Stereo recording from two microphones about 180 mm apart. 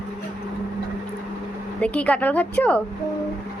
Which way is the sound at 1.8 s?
10° left (ahead or behind).